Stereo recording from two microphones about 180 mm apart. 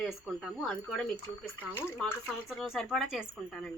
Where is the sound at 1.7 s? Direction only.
10° left (ahead or behind).